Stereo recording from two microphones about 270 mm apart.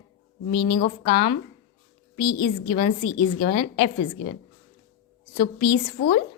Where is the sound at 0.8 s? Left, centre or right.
Left.